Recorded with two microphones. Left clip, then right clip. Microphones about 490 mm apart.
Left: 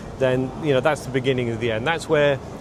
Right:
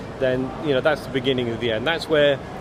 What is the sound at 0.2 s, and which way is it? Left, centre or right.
Speech, left.